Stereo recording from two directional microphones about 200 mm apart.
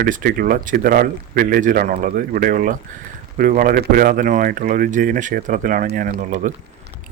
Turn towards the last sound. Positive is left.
turn(degrees=-40)  # may be behind; listen again after turning